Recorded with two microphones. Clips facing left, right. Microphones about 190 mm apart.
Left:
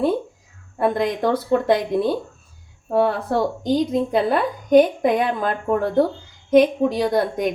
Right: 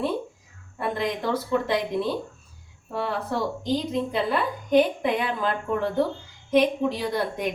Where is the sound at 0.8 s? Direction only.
45° left (ahead or behind).